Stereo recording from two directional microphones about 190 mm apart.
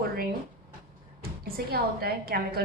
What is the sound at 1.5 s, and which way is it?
A woman's voice, 55° right (ahead or behind).